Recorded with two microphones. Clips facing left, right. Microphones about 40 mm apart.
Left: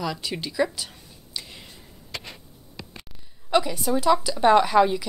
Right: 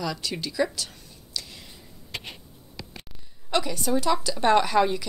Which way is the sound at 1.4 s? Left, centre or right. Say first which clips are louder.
Even; left.